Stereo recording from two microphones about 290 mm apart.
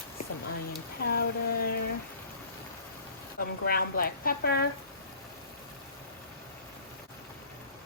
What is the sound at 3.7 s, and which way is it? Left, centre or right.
Speech, left.